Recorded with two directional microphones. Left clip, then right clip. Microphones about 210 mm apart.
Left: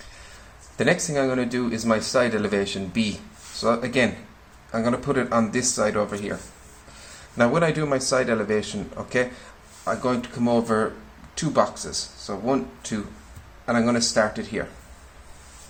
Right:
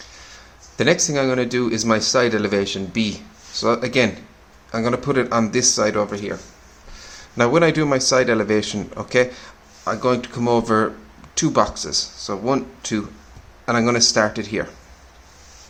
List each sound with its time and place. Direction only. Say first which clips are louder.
0.8 s speech: right 4 dB; 25° right (ahead or behind)
7.3 s speech: right 5 dB; 25° right (ahead or behind)